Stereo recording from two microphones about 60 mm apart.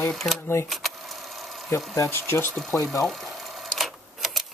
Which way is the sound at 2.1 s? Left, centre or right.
Left.